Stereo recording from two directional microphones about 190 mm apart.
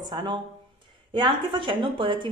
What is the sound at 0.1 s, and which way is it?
A woman's voice, 20° right (ahead or behind).